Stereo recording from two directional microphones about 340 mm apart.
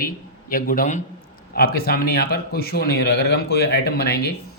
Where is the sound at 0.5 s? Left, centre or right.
Left.